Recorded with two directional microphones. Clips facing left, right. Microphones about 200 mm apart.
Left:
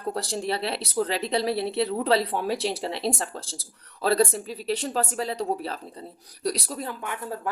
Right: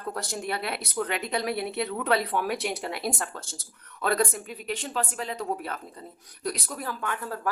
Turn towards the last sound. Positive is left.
turn(degrees=20)  # may be behind; listen again after turning